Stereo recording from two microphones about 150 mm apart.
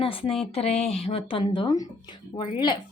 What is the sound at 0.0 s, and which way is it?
Speech, 40° left (ahead or behind).